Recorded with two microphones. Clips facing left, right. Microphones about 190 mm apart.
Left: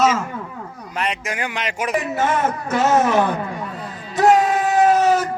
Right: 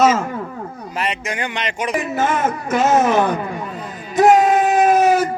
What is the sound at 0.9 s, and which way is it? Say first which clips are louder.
Speech: right 1 dB; centre (ahead or behind).